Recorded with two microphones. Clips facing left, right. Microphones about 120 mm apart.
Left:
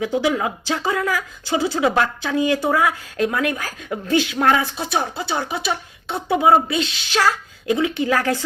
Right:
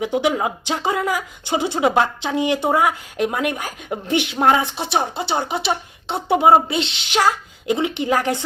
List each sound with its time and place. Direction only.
0.0 s a woman's voice: 20° right (ahead or behind)